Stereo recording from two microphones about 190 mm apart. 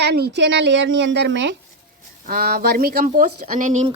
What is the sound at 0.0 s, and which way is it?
A woman's voice, 60° right (ahead or behind).